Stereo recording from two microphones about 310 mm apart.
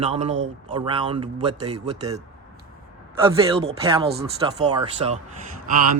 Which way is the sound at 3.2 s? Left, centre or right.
Centre.